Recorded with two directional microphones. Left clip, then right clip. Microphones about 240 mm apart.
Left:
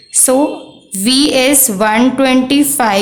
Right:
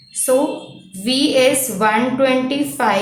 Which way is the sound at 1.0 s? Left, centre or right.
Left.